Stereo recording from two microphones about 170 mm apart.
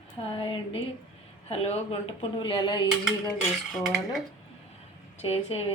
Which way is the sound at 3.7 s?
Centre (ahead or behind).